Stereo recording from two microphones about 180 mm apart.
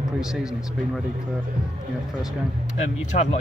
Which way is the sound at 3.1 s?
55° left (ahead or behind).